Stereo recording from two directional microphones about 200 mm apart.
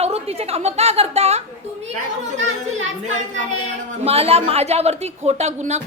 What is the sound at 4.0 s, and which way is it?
A woman's voice, 30° right (ahead or behind).